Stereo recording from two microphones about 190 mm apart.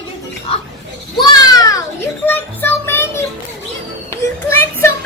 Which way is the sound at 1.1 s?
20° left (ahead or behind).